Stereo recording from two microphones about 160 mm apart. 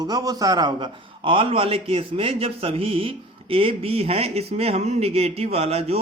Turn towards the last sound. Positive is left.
turn(degrees=-40)  # may be behind; listen again after turning